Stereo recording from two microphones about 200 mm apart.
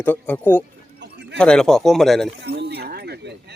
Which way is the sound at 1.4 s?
5° left (ahead or behind).